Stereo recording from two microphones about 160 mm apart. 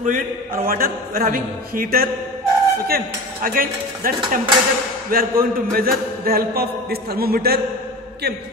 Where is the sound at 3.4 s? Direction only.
65° right (ahead or behind).